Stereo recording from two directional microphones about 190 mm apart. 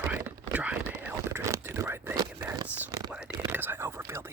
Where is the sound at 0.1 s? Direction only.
10° right (ahead or behind).